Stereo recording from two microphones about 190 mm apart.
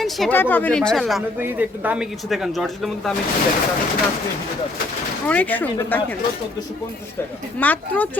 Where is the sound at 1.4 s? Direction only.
10° right (ahead or behind).